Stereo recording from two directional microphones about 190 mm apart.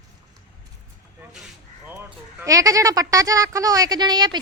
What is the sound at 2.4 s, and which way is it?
A woman's voice, 15° right (ahead or behind).